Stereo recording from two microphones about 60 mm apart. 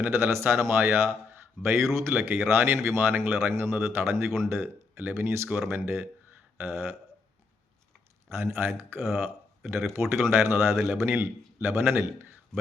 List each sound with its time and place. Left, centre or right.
0.0 s a man's voice: right
8.3 s a man's voice: right